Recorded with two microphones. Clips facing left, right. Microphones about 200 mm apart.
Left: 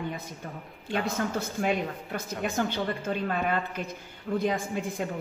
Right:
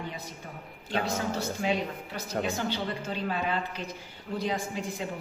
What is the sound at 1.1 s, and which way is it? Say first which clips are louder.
Speech: left 1 dB; 50° left (ahead or behind).